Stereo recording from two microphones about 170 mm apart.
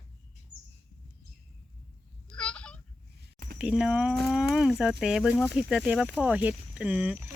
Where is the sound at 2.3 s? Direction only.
5° left (ahead or behind).